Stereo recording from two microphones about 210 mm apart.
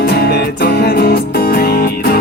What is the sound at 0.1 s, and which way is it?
Music, 50° left (ahead or behind).